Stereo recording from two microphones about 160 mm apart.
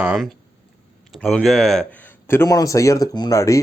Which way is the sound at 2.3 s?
20° left (ahead or behind).